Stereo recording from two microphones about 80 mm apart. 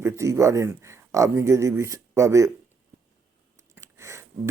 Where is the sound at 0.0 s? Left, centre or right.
Right.